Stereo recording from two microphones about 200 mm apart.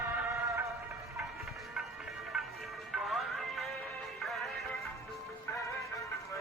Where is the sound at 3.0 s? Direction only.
Centre (ahead or behind).